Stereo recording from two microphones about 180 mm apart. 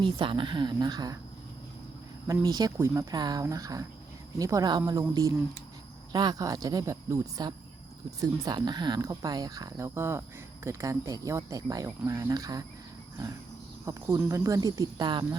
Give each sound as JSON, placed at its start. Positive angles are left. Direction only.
{"t": 0.0, "sound": "a woman's voice", "side_deg": -30}
{"t": 2.2, "sound": "a woman's voice", "side_deg": -20}
{"t": 13.8, "sound": "a woman's voice", "side_deg": -15}